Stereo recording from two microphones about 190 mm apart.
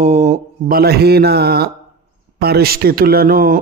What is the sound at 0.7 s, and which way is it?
A man's voice, 55° right (ahead or behind).